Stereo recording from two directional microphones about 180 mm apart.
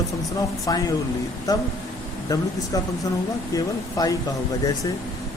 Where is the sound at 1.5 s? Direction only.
20° left (ahead or behind).